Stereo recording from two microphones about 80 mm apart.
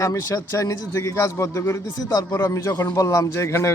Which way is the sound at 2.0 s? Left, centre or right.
Left.